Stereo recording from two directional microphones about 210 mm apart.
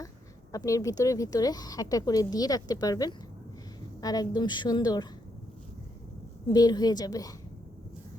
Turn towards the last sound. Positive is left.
turn(degrees=15)  # may be behind; listen again after turning